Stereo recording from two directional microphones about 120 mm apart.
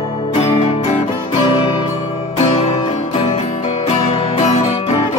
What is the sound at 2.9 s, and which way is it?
Music, 65° left (ahead or behind).